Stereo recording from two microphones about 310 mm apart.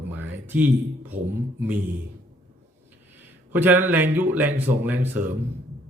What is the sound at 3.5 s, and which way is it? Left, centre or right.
Speech, centre.